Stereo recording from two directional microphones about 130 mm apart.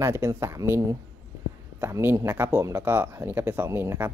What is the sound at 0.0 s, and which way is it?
Speech, 20° right (ahead or behind).